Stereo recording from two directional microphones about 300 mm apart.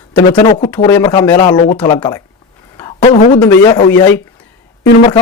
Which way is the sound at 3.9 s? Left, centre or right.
Centre.